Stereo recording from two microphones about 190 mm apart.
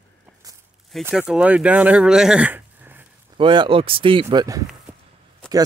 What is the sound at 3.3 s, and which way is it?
Speech, 25° right (ahead or behind).